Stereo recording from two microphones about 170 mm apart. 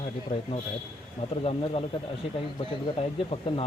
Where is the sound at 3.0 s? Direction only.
35° left (ahead or behind).